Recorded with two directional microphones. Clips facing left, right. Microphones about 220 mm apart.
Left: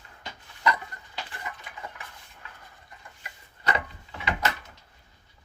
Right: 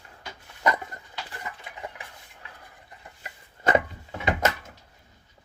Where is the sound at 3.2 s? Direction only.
45° right (ahead or behind).